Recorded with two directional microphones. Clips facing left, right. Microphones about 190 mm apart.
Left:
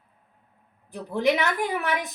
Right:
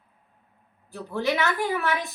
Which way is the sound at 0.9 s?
15° left (ahead or behind).